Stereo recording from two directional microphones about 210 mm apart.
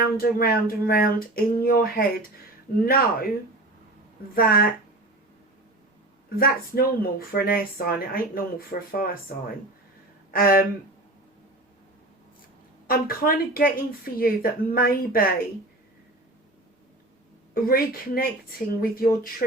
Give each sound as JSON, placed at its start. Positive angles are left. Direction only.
{"t": 0.0, "sound": "speech", "side_deg": 45}
{"t": 4.4, "sound": "speech", "side_deg": 45}
{"t": 6.4, "sound": "speech", "side_deg": 45}
{"t": 10.3, "sound": "speech", "side_deg": 45}
{"t": 12.9, "sound": "speech", "side_deg": 45}
{"t": 17.5, "sound": "speech", "side_deg": 45}